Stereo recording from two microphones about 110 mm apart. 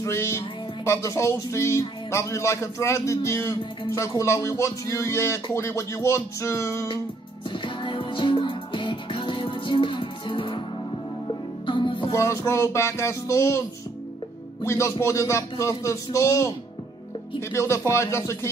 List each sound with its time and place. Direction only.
0.0 s speech: 25° left (ahead or behind)
7.4 s music: 50° left (ahead or behind)
12.1 s speech: 30° left (ahead or behind)
14.6 s speech: 25° left (ahead or behind)